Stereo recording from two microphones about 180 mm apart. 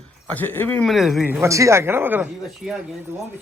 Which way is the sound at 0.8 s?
Centre (ahead or behind).